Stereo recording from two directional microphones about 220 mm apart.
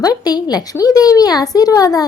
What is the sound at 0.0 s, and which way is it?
A child's voice, 15° left (ahead or behind).